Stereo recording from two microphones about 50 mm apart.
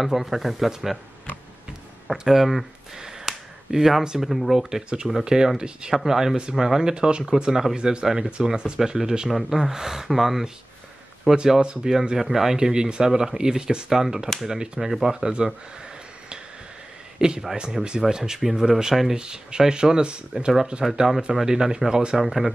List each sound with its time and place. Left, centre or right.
0.0 s speech: centre
2.0 s speech: centre
3.0 s finger snapping: centre
4.0 s speech: centre
4.3 s speech: centre
17.2 s speech: centre
17.8 s speech: centre
18.1 s speech: centre
20.8 s speech: centre